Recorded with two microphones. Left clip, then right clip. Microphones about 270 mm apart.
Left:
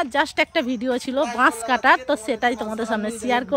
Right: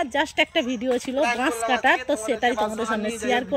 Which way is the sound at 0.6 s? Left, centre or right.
Centre.